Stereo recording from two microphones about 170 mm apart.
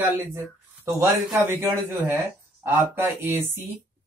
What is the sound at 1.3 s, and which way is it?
Speech, 15° right (ahead or behind).